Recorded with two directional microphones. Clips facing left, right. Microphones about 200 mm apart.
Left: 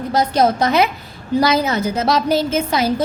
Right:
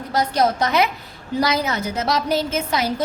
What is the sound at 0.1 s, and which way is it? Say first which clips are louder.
A woman's voice: left 3 dB; 25° left (ahead or behind).